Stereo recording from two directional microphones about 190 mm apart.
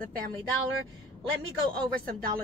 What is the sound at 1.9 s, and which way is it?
Speech, 50° right (ahead or behind).